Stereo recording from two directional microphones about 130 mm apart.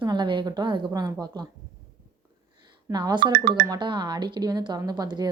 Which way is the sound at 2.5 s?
30° right (ahead or behind).